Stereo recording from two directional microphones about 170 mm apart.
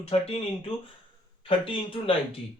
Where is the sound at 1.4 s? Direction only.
30° left (ahead or behind).